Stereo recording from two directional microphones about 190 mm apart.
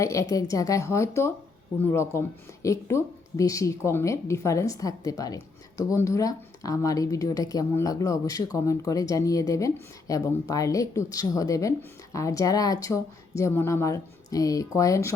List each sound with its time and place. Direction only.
0.0 s speech: 15° left (ahead or behind)